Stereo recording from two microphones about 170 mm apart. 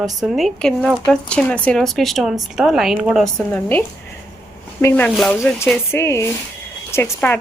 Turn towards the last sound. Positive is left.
turn(degrees=15)  # may be behind; listen again after turning